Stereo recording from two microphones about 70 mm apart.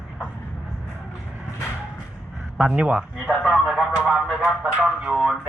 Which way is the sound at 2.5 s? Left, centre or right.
Centre.